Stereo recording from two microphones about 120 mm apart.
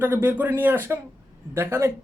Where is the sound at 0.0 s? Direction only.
15° right (ahead or behind).